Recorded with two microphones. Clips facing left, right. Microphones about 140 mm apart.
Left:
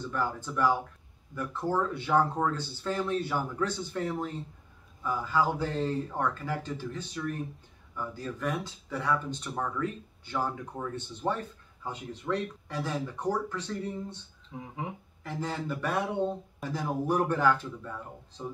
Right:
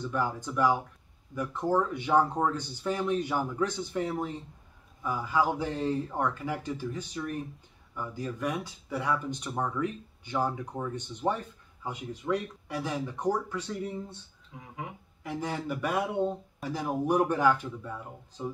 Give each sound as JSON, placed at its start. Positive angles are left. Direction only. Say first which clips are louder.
{"t": 0.0, "sound": "speech", "louder": "right 1 dB", "side_deg": -15}
{"t": 14.5, "sound": "speech", "louder": "left 7 dB", "side_deg": 30}
{"t": 15.2, "sound": "speech", "louder": "right 1 dB", "side_deg": -10}